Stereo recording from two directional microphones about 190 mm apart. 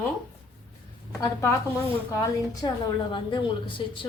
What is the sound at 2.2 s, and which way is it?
A woman's voice, 20° left (ahead or behind).